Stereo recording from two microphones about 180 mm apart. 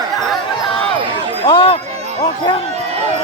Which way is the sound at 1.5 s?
30° left (ahead or behind).